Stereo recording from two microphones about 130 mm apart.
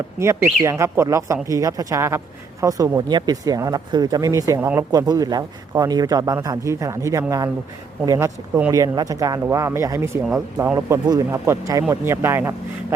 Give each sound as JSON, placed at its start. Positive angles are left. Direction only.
{"t": 0.2, "sound": "speech", "side_deg": -20}